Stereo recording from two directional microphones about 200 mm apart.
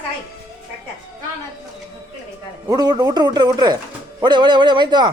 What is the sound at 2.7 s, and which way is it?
Speech, 20° right (ahead or behind).